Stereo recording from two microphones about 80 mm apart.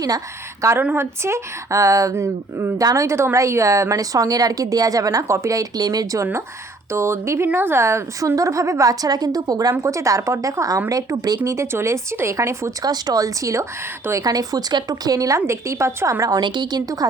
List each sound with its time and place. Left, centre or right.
0.8 s a woman's voice: right
1.2 s speech: right
6.9 s speech: right
11.4 s speech: right
12.8 s speech: right
14.3 s speech: right
15.4 s speech: right
16.4 s a woman's voice: right